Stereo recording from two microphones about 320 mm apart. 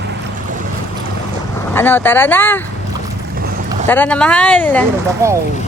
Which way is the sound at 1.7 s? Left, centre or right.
Centre.